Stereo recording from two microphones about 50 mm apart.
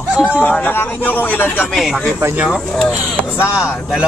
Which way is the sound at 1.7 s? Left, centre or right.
Centre.